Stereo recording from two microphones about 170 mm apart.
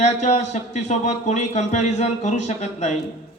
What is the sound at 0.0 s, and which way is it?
Speech, 40° left (ahead or behind).